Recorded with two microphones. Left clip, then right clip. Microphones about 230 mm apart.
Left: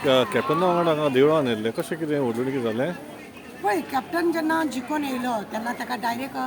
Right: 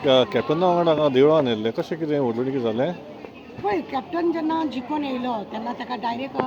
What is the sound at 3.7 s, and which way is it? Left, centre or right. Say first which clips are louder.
A woman's voice: left 1 dB; left.